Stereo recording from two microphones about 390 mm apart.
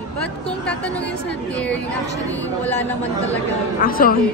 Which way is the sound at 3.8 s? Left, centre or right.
Left.